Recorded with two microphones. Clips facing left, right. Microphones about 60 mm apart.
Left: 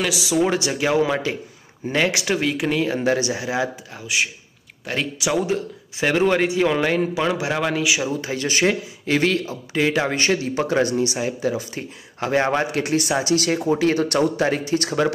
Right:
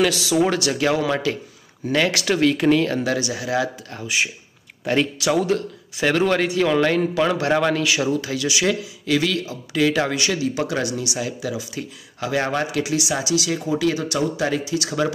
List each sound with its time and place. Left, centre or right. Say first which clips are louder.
0.0 s a man's voice: right 2 dB; centre
3.0 s speech: left 2 dB; left
3.9 s speech: even; centre
5.2 s a man's voice: right 2 dB; centre
8.2 s speech: left 1 dB; left
10.1 s speech: left 1 dB; left
13.2 s speech: left 2 dB; left